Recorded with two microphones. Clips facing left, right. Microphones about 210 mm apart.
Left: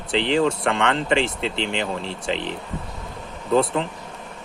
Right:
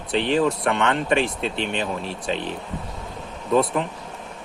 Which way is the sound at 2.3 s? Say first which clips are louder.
Left 1 dB; 90° left.